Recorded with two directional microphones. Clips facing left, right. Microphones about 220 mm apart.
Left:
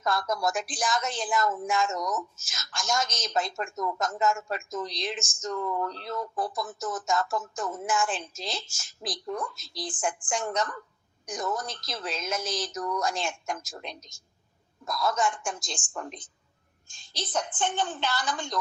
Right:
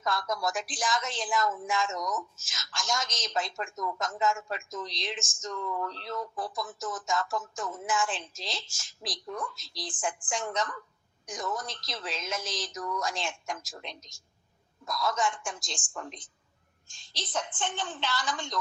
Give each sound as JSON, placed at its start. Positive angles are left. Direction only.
{"t": 0.0, "sound": "speech", "side_deg": 50}
{"t": 14.9, "sound": "speech", "side_deg": 50}